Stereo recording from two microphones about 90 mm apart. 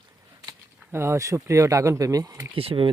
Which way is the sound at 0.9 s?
30° right (ahead or behind).